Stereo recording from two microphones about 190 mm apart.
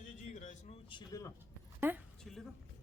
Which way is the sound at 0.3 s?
40° left (ahead or behind).